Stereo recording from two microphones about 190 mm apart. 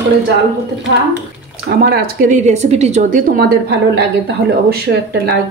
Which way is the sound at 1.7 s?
60° right (ahead or behind).